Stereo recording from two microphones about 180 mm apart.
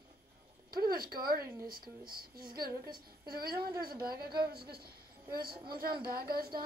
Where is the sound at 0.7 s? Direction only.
55° right (ahead or behind).